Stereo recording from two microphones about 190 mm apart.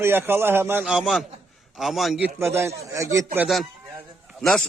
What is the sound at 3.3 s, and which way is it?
A man's voice, centre (ahead or behind).